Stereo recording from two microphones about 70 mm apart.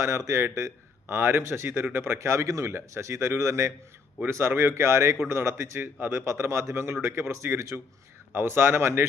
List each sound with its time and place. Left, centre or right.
0.0 s speech: right
1.0 s speech: right
6.2 s speech: right